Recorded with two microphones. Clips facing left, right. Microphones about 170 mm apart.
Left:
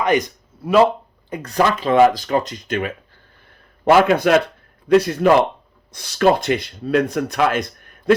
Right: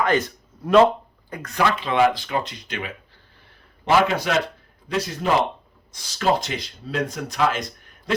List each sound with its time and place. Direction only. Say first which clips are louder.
0.0 s a man's voice: left 3 dB; 15° left (ahead or behind)
1.3 s speech: left 4 dB; 30° left (ahead or behind); by 8.1 s 55° left (ahead or behind)